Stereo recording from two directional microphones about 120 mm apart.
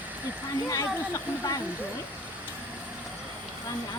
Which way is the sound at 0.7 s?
30° left (ahead or behind).